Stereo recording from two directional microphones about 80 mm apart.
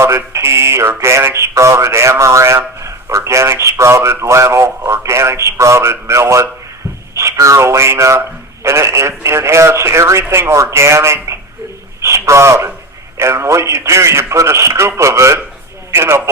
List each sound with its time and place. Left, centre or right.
0.0 s speech: right